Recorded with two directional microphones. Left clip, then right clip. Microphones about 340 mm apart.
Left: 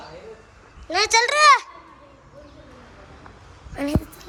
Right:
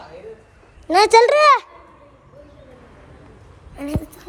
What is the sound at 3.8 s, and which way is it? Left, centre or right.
Speech, centre.